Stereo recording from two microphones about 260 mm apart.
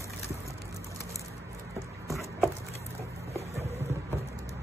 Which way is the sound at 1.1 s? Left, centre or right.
Centre.